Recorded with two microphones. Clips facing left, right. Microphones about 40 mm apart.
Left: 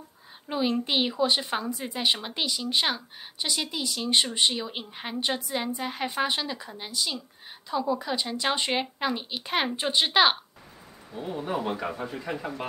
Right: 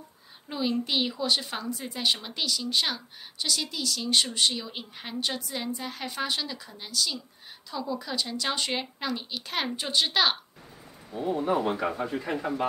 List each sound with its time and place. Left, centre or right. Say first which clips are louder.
0.5 s a woman's voice: left 2 dB; centre
11.2 s speech: right 4 dB; centre